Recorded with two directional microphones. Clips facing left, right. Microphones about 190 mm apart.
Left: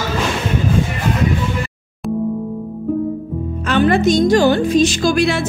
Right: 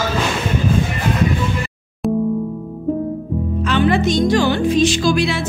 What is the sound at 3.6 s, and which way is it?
Music, 45° left (ahead or behind).